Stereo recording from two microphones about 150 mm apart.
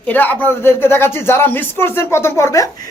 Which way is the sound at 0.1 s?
10° left (ahead or behind).